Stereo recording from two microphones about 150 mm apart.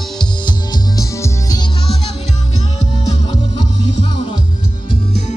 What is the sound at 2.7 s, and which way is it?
Music, 45° left (ahead or behind).